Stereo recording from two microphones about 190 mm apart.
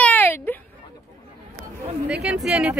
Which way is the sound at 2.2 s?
5° right (ahead or behind).